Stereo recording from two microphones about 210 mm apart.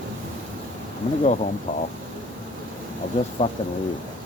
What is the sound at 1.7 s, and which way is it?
Speech, 40° left (ahead or behind).